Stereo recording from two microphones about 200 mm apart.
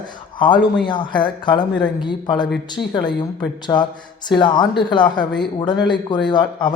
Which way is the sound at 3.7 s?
15° left (ahead or behind).